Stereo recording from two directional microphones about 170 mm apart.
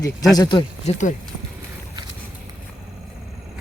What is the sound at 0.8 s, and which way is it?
Speech, 45° left (ahead or behind).